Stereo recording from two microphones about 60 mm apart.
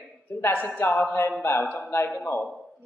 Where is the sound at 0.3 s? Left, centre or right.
Left.